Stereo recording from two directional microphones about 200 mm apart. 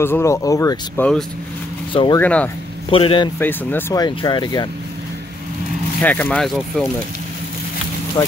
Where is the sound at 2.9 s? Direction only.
25° left (ahead or behind).